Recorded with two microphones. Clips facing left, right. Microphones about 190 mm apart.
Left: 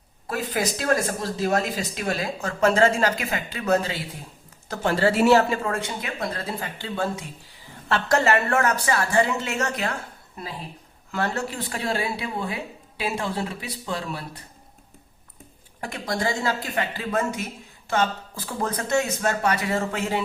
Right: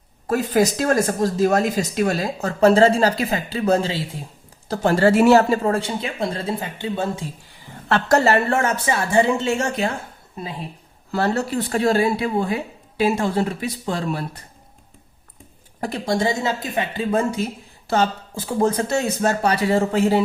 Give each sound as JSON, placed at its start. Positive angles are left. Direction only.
{"t": 0.3, "sound": "speech", "side_deg": -40}
{"t": 4.7, "sound": "speech", "side_deg": -40}
{"t": 8.1, "sound": "speech", "side_deg": -35}
{"t": 11.1, "sound": "speech", "side_deg": -35}
{"t": 15.8, "sound": "speech", "side_deg": -35}
{"t": 16.1, "sound": "speech", "side_deg": -20}
{"t": 18.3, "sound": "speech", "side_deg": -25}